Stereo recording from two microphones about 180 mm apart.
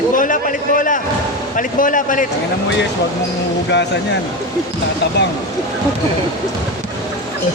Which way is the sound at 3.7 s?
75° left (ahead or behind).